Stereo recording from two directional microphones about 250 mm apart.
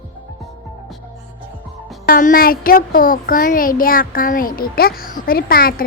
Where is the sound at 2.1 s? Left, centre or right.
Left.